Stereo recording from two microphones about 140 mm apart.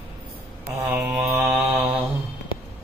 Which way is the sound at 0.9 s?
15° right (ahead or behind).